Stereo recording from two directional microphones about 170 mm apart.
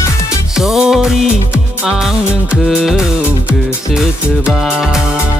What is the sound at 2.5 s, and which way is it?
Music, 5° right (ahead or behind).